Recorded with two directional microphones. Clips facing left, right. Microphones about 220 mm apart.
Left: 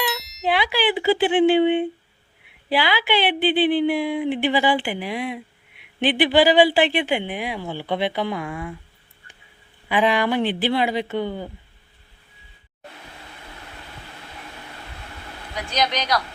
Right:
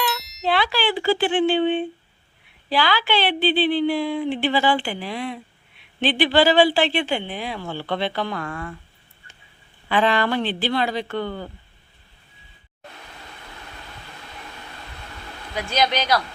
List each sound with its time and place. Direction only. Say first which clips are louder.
0.0 s a sound: even; centre (ahead or behind)
0.4 s speech: left 1 dB; 15° left (ahead or behind)
9.9 s speech: left 1 dB; 15° left (ahead or behind)